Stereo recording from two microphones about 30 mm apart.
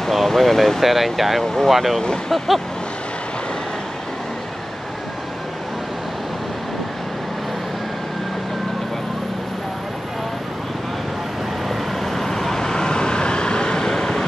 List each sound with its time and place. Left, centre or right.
0.1 s speech: centre
1.4 s speech: centre
1.7 s speech: centre
11.7 s vehicle: centre